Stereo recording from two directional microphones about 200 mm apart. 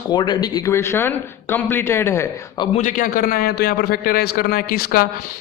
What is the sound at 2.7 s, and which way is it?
A man's voice, 40° left (ahead or behind).